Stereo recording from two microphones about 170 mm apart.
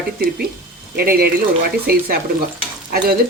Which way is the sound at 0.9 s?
65° right (ahead or behind).